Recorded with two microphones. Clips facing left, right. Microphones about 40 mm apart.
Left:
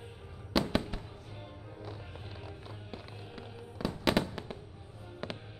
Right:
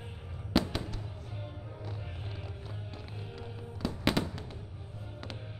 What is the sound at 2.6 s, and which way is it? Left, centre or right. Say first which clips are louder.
Music: right 1 dB; centre.